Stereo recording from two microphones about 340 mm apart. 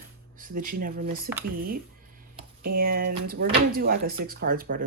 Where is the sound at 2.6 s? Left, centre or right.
Right.